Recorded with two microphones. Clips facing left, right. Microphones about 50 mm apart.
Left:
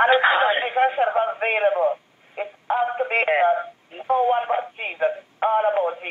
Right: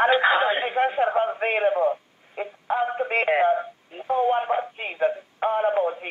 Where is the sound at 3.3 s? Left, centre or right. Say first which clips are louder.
Left 1 dB; centre.